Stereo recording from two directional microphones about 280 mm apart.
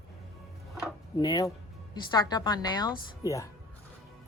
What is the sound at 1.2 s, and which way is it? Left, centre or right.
Speech, centre.